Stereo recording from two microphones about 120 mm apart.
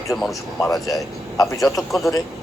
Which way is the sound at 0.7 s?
30° left (ahead or behind).